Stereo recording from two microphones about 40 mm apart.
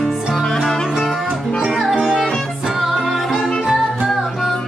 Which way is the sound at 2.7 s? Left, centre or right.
Centre.